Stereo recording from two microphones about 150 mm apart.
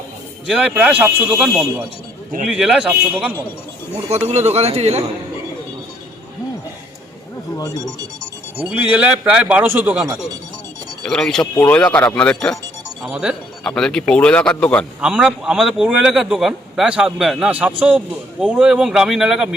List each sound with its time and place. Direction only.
0.4 s a man's voice: 5° right (ahead or behind)
2.5 s a man's voice: 5° right (ahead or behind)
4.3 s a man's voice: 45° right (ahead or behind)
7.5 s speech: 25° left (ahead or behind)
8.7 s a man's voice: 10° right (ahead or behind)
11.0 s a man's voice: 5° left (ahead or behind)
13.1 s a man's voice: 5° right (ahead or behind)
13.7 s a man's voice: 5° left (ahead or behind)
15.0 s a man's voice: 5° right (ahead or behind)